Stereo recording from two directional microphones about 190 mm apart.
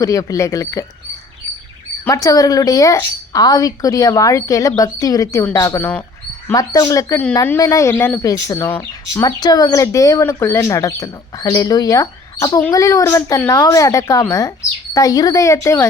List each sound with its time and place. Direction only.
0.0 s speech: 20° left (ahead or behind)
2.0 s speech: 20° left (ahead or behind)